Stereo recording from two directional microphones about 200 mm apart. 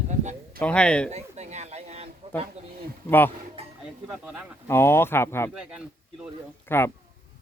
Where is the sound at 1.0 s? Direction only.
35° right (ahead or behind).